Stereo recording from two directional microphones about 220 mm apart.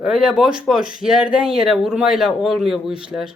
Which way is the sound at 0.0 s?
Centre (ahead or behind).